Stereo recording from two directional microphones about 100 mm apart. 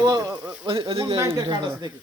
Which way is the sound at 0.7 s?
55° right (ahead or behind).